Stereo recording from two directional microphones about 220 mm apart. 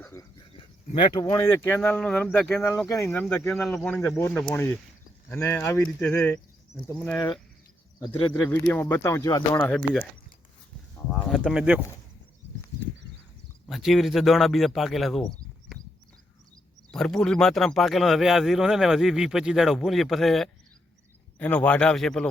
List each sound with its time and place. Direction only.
0.0 s a sound: 15° left (ahead or behind)
1.0 s speech: 15° left (ahead or behind)
8.4 s speech: 10° left (ahead or behind)
9.7 s speech: 5° left (ahead or behind)
11.2 s speech: centre (ahead or behind)
13.7 s speech: centre (ahead or behind)
15.7 s a sound: centre (ahead or behind)
16.9 s speech: 5° left (ahead or behind)